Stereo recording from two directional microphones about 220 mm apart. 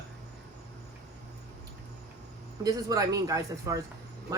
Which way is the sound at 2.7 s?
15° right (ahead or behind).